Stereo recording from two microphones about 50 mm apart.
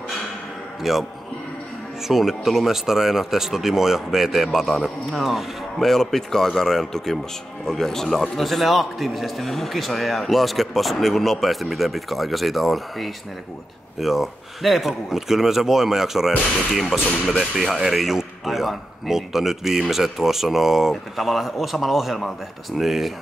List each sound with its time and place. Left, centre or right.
0.8 s speech: centre
2.0 s a man's voice: centre
16.8 s speech: centre
17.4 s a man's voice: centre